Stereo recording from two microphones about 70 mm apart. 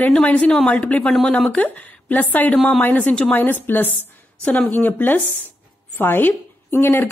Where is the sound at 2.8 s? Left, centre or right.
Left.